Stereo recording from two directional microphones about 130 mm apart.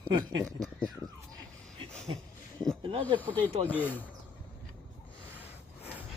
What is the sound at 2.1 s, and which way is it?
Speech, 40° right (ahead or behind).